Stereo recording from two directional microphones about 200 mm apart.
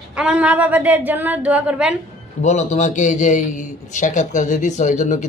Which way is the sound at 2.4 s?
35° left (ahead or behind).